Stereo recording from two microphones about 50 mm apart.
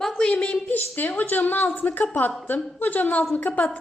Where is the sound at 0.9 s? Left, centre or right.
Left.